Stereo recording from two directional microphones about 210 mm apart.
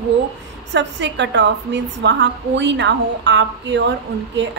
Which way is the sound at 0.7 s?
55° right (ahead or behind).